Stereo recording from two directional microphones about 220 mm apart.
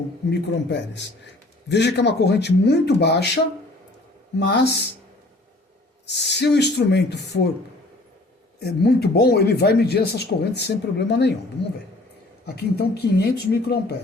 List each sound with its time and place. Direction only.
0.3 s speech: 50° left (ahead or behind)
6.1 s speech: 50° left (ahead or behind)
8.6 s speech: 45° left (ahead or behind)
12.5 s speech: 45° left (ahead or behind)